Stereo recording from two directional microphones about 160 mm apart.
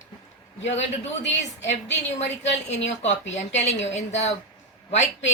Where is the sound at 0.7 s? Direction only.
45° left (ahead or behind).